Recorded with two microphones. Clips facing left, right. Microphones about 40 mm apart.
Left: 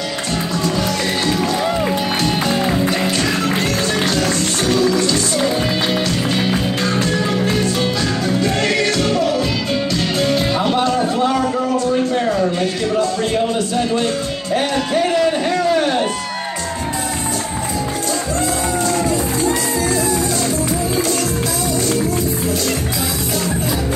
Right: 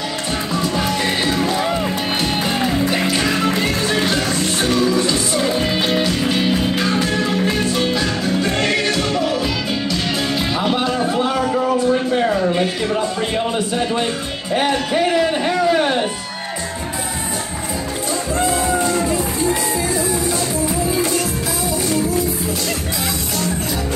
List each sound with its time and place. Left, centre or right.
4.6 s music: centre
18.4 s music: right